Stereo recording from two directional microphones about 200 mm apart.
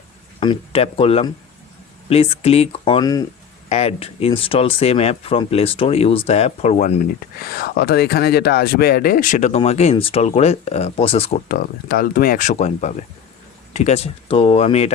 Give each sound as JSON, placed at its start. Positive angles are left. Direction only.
{"t": 0.3, "sound": "speech", "side_deg": 30}
{"t": 3.7, "sound": "speech", "side_deg": 30}
{"t": 11.4, "sound": "speech", "side_deg": 45}